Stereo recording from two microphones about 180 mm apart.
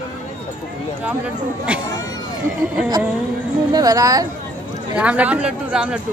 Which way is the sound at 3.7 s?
20° right (ahead or behind).